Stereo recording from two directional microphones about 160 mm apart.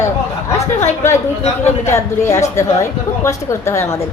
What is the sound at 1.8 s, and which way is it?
A woman's voice, 15° left (ahead or behind).